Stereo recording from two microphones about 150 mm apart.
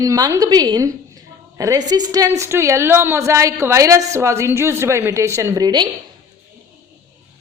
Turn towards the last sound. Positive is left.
turn(degrees=-25)  # may be behind; listen again after turning